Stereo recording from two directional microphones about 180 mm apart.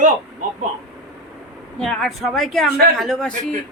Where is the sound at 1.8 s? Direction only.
Centre (ahead or behind).